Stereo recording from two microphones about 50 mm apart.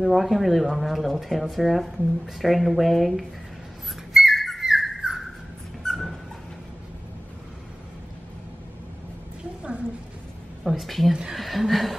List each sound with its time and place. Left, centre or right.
0.0 s speech: centre
4.1 s bird: centre
5.9 s dog: centre
9.6 s a sound: right
10.6 s speech: centre